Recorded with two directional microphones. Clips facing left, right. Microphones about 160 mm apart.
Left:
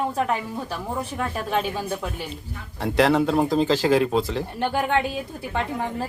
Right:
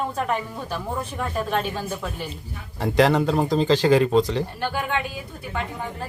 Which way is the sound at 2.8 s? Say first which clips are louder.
Even; centre (ahead or behind).